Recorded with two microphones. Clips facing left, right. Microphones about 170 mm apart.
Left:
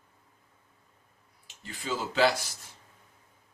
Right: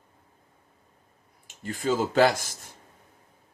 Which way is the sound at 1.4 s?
50° right (ahead or behind).